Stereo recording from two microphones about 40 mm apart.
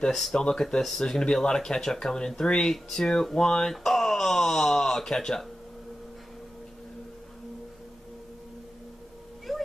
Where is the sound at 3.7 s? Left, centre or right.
Centre.